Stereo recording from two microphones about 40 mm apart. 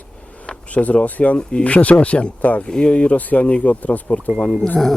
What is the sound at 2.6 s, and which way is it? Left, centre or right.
Speech, centre.